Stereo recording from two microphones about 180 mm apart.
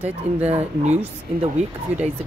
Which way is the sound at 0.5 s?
35° right (ahead or behind).